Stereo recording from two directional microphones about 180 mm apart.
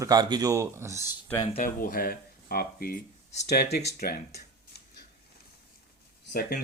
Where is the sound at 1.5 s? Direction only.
50° left (ahead or behind).